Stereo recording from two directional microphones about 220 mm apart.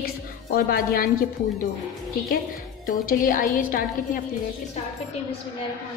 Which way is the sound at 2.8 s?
40° left (ahead or behind).